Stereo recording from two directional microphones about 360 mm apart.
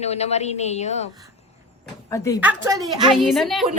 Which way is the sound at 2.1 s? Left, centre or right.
Centre.